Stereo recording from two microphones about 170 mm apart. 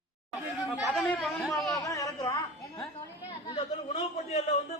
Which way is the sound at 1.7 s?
20° left (ahead or behind).